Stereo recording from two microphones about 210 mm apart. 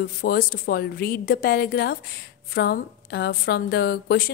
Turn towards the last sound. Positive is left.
turn(degrees=50)  # may be behind; listen again after turning